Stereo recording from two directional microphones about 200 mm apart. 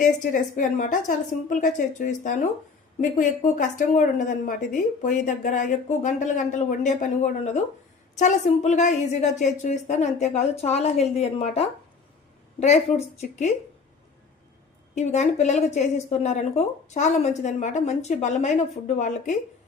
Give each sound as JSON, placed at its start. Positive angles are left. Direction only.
{"t": 0.0, "sound": "speech", "side_deg": 40}
{"t": 14.9, "sound": "speech", "side_deg": 35}